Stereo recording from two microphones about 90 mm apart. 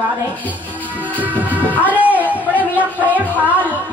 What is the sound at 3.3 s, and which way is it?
Music, 20° right (ahead or behind).